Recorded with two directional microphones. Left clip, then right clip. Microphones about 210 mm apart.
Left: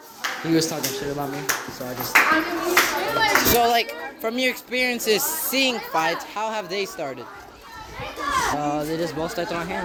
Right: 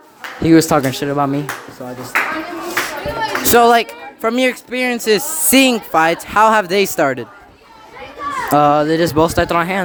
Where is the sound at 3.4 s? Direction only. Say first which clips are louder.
Right 8 dB; 50° right (ahead or behind).